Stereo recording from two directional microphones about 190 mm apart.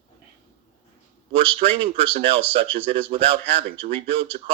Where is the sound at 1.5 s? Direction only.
30° right (ahead or behind).